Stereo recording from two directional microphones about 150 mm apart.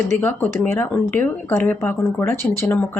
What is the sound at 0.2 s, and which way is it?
Speech, 10° left (ahead or behind).